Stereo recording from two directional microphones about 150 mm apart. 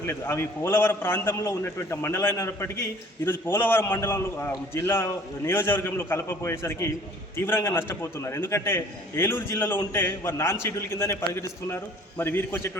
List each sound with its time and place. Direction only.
0.0 s a man's voice: 15° left (ahead or behind)